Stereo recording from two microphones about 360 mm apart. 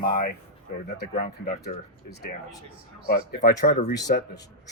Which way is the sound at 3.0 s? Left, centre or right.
Left.